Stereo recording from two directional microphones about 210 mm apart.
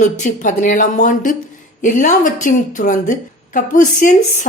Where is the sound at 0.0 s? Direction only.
35° left (ahead or behind).